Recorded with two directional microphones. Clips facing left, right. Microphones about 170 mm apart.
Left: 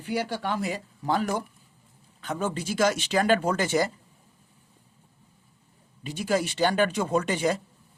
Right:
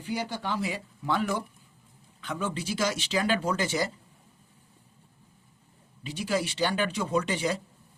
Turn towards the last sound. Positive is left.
turn(degrees=50)  # may be behind; listen again after turning